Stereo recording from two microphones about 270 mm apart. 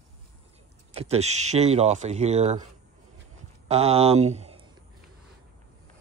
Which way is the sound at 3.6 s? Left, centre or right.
Right.